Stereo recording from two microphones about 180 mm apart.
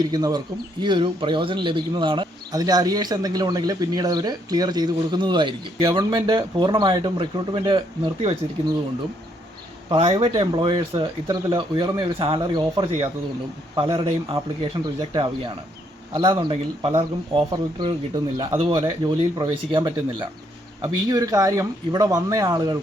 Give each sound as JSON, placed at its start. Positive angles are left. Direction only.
{"t": 0.1, "sound": "speech", "side_deg": -20}
{"t": 9.9, "sound": "speech", "side_deg": -35}